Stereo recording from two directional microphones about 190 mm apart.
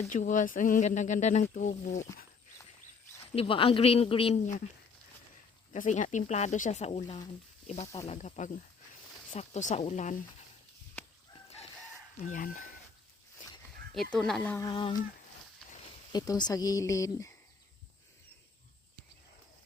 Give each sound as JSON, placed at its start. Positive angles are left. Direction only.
{"t": 0.1, "sound": "speech", "side_deg": 40}
{"t": 3.3, "sound": "speech", "side_deg": 30}
{"t": 5.7, "sound": "speech", "side_deg": 40}
{"t": 12.3, "sound": "speech", "side_deg": 45}
{"t": 13.9, "sound": "speech", "side_deg": 0}
{"t": 14.6, "sound": "speech", "side_deg": 25}
{"t": 16.1, "sound": "speech", "side_deg": 20}